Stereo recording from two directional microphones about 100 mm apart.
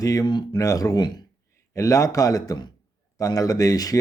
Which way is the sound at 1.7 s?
35° left (ahead or behind).